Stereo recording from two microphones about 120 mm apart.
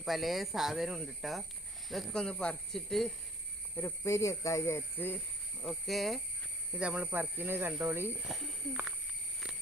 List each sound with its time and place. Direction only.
0.0 s speech: centre (ahead or behind)
3.8 s speech: 20° left (ahead or behind)
5.6 s speech: centre (ahead or behind); by 8.1 s 15° right (ahead or behind)
8.2 s speech: centre (ahead or behind)